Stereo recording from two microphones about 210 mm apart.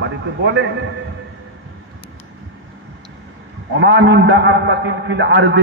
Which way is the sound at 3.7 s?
60° right (ahead or behind).